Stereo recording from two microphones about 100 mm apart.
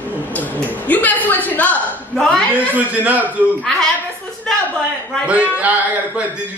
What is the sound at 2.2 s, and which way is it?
Speech, 5° left (ahead or behind).